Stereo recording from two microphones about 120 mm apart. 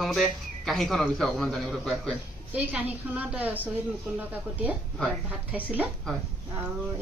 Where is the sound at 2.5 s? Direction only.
15° right (ahead or behind).